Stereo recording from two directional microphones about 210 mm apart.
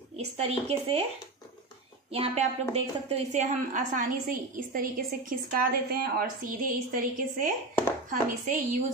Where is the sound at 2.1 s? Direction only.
30° right (ahead or behind).